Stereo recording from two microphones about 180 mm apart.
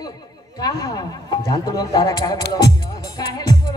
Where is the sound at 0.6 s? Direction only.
20° left (ahead or behind).